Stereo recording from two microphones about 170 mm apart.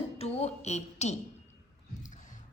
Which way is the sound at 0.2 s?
40° left (ahead or behind).